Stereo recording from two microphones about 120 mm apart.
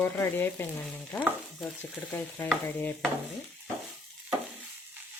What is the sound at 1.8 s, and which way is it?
Speech, 15° left (ahead or behind).